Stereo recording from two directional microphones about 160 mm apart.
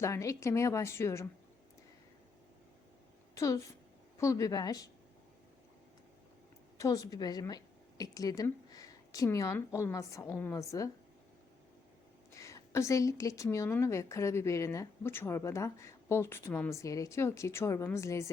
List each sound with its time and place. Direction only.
0.0 s a woman's voice: 20° left (ahead or behind)
3.3 s speech: 20° left (ahead or behind)
6.7 s a woman's voice: 20° left (ahead or behind)
12.3 s speech: 20° left (ahead or behind)